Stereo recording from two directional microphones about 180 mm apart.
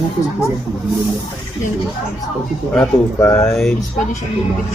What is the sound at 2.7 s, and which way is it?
Speech, 10° left (ahead or behind).